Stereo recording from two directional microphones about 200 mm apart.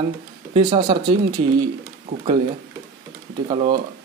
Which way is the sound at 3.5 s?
25° right (ahead or behind).